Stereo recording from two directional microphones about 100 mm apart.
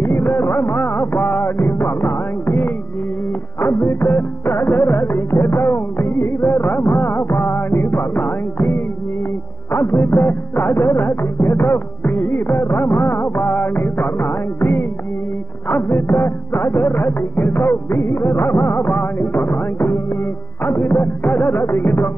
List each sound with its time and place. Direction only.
0.0 s music: 20° left (ahead or behind)